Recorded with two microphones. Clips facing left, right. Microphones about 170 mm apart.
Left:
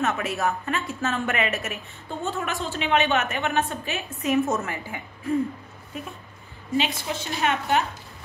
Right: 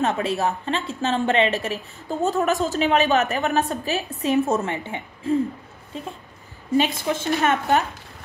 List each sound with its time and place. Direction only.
0.0 s a woman's voice: 30° right (ahead or behind)
5.9 s a sound: 30° right (ahead or behind)
6.8 s speech: 50° right (ahead or behind)